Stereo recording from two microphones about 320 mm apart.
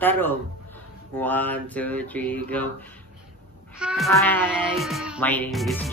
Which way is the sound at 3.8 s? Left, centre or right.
Centre.